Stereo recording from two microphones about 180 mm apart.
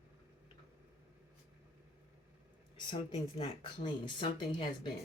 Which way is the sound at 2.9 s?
30° left (ahead or behind).